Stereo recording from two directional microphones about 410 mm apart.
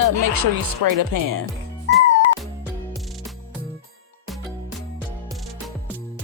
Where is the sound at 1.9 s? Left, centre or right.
Right.